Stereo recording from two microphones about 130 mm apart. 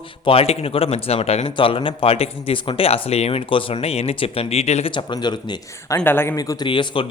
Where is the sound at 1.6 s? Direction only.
40° left (ahead or behind).